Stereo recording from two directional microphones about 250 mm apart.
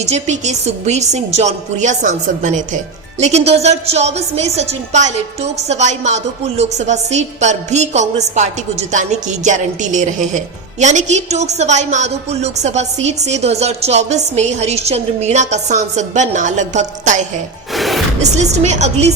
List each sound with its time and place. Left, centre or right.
0.0 s a woman's voice: right
17.7 s music: centre
18.2 s a woman's voice: right